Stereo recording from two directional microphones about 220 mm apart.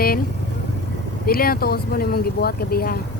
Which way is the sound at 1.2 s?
45° left (ahead or behind).